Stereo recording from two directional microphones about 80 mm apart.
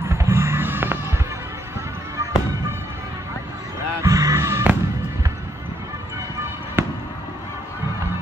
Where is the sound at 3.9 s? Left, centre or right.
Right.